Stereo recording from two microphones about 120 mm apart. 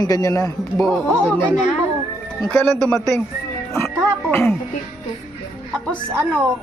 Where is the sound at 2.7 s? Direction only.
5° left (ahead or behind).